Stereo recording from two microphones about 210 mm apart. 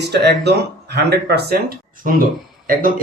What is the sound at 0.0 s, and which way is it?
Speech, 50° right (ahead or behind).